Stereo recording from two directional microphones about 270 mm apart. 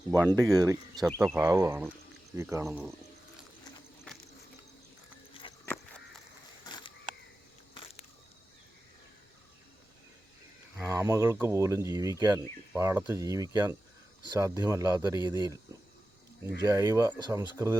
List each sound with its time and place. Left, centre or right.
0.1 s speech: centre
1.0 s speech: centre
6.7 s a sound: centre
10.8 s speech: centre
16.6 s speech: centre